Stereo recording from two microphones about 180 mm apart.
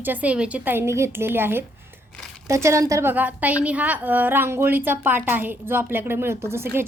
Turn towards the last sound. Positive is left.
turn(degrees=-15)  # may be behind; listen again after turning